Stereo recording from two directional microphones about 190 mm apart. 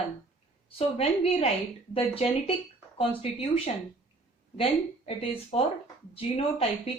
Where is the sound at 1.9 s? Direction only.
30° left (ahead or behind).